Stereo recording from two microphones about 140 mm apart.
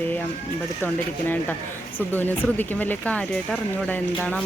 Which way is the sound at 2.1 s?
15° left (ahead or behind).